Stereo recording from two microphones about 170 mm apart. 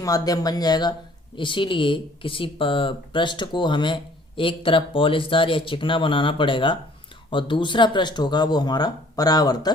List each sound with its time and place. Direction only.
0.0 s speech: 20° left (ahead or behind)